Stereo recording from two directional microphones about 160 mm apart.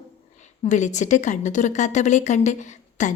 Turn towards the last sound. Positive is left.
turn(degrees=50)  # may be behind; listen again after turning